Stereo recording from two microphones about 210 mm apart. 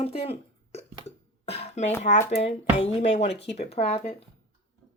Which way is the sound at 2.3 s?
30° left (ahead or behind).